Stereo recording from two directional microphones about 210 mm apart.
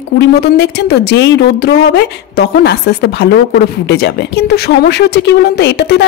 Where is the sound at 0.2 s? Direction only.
50° left (ahead or behind).